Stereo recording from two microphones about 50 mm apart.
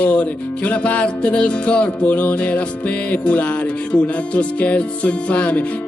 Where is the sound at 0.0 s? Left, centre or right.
Left.